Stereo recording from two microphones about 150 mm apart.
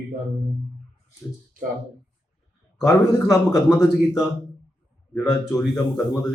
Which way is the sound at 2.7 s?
Centre (ahead or behind).